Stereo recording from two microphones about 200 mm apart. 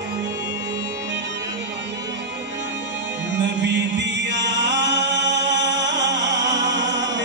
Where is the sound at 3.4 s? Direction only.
60° right (ahead or behind).